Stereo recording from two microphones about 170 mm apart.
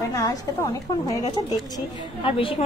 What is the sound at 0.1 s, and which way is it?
Speech, 20° left (ahead or behind).